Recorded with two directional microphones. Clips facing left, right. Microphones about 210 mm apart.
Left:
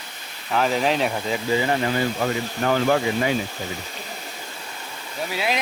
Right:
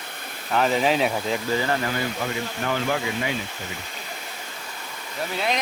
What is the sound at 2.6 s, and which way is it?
Speech, 45° left (ahead or behind).